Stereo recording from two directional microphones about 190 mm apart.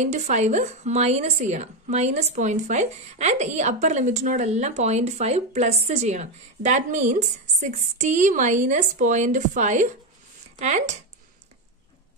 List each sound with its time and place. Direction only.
0.0 s speech: 40° right (ahead or behind)